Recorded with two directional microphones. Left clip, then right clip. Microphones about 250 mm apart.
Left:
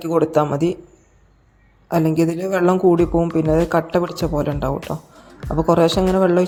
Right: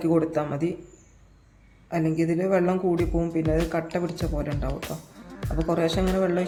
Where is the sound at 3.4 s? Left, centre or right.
Centre.